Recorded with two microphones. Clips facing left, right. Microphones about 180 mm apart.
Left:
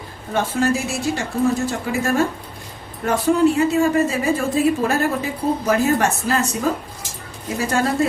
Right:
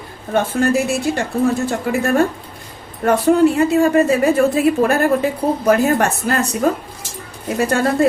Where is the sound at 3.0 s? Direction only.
60° right (ahead or behind).